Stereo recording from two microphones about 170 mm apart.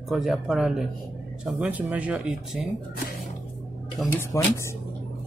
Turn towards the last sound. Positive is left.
turn(degrees=15)  # may be behind; listen again after turning